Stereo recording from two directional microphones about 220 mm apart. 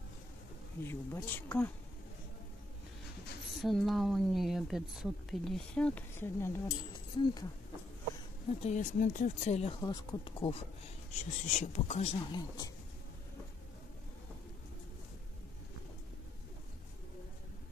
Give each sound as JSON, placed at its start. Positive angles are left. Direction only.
{"t": 0.8, "sound": "speech", "side_deg": 10}
{"t": 3.6, "sound": "a woman's voice", "side_deg": 0}
{"t": 8.6, "sound": "speech", "side_deg": 35}
{"t": 9.8, "sound": "speech", "side_deg": 20}